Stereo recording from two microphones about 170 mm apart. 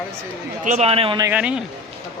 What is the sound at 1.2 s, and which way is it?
Speech, 10° right (ahead or behind).